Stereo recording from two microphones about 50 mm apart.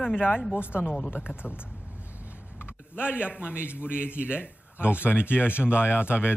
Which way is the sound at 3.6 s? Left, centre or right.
Left.